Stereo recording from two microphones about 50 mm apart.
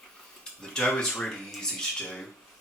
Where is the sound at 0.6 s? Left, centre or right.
Centre.